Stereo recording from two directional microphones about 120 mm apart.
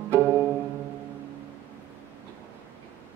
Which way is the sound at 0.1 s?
20° right (ahead or behind).